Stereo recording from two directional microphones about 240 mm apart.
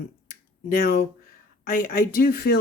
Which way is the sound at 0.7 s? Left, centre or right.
Left.